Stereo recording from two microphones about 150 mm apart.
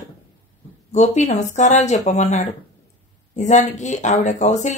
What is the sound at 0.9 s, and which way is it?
Speech, 50° left (ahead or behind).